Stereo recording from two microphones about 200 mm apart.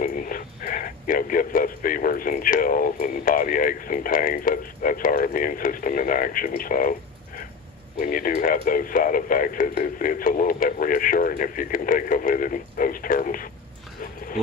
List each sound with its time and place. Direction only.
0.0 s speech: 45° left (ahead or behind)
7.9 s speech: 45° left (ahead or behind)